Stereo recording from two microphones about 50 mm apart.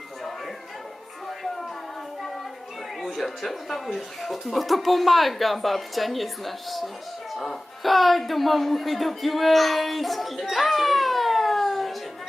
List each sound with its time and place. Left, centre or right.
3.0 s speech: centre